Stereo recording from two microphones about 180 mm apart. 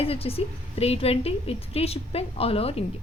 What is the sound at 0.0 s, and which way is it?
A woman's voice, 30° left (ahead or behind).